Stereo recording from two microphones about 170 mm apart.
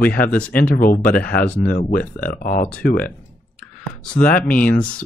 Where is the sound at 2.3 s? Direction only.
55° left (ahead or behind).